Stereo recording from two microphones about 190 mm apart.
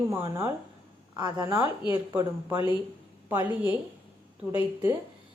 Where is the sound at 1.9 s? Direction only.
10° right (ahead or behind).